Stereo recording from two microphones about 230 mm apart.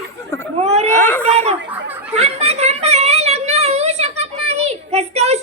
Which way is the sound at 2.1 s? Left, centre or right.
Right.